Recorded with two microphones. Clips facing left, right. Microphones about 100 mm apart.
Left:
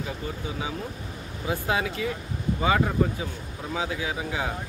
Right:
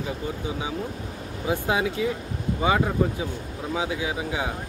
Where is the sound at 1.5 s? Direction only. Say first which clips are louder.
Right 2 dB; 20° right (ahead or behind).